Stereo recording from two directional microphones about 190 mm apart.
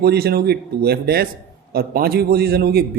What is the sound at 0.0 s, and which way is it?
Speech, 55° right (ahead or behind).